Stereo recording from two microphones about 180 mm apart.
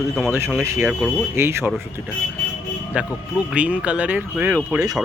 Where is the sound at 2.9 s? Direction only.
5° right (ahead or behind).